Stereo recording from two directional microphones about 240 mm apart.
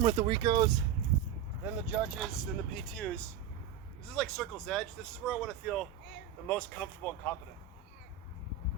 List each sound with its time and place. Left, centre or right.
0.0 s speech: right
1.6 s speech: centre
4.1 s speech: centre